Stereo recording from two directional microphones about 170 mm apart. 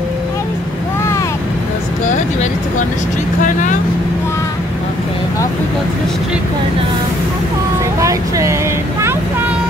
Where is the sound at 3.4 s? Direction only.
50° left (ahead or behind).